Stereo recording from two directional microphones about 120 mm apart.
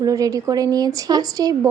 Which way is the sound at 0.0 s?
30° right (ahead or behind).